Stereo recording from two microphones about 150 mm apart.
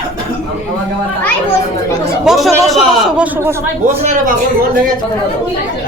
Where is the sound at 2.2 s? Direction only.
Centre (ahead or behind).